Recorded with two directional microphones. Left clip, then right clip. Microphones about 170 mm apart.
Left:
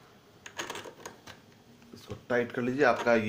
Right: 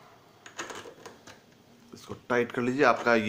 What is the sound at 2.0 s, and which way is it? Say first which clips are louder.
Speech: right 2 dB; 25° right (ahead or behind).